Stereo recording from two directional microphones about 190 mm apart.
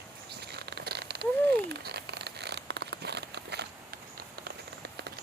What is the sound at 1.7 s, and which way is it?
Crumpling, 60° right (ahead or behind).